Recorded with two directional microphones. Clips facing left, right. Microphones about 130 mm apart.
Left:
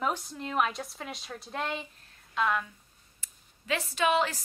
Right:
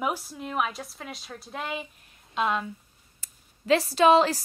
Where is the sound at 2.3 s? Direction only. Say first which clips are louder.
Right 2 dB; 20° right (ahead or behind).